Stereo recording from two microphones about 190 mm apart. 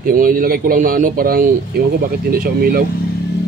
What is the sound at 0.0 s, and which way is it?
A man's voice, 50° right (ahead or behind).